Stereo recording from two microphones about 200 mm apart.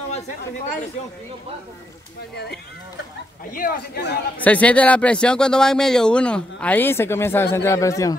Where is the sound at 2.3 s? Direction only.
55° left (ahead or behind).